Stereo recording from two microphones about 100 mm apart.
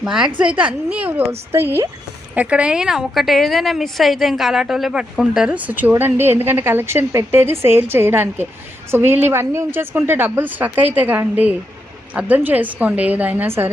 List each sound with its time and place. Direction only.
0.0 s a woman's voice: 5° right (ahead or behind); by 1.9 s 25° right (ahead or behind)
2.3 s a woman's voice: 15° right (ahead or behind)